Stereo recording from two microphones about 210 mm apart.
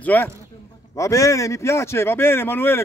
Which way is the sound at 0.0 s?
10° left (ahead or behind).